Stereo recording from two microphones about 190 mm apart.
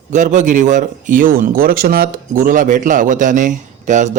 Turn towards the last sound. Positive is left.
turn(degrees=-40)  # may be behind; listen again after turning